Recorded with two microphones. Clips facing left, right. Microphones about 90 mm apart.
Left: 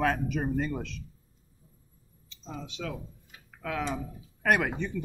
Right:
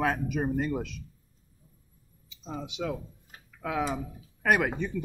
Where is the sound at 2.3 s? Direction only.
15° right (ahead or behind).